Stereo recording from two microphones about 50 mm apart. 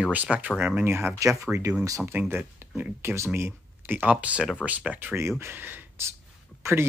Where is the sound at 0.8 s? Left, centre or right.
Right.